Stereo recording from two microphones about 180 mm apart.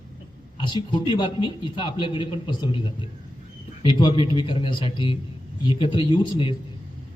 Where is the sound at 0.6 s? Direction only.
25° left (ahead or behind).